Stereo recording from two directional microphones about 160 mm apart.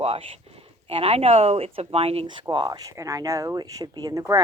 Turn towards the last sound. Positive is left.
turn(degrees=-20)  # may be behind; listen again after turning